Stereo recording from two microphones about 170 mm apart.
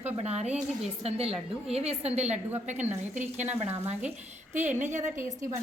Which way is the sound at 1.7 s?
35° right (ahead or behind).